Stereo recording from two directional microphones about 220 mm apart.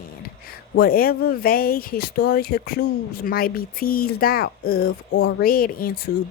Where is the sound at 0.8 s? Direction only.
40° left (ahead or behind).